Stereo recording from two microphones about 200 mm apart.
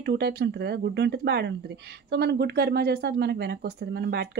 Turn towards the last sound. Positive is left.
turn(degrees=-55)  # may be behind; listen again after turning